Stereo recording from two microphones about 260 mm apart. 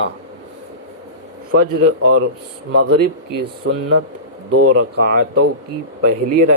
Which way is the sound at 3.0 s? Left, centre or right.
Right.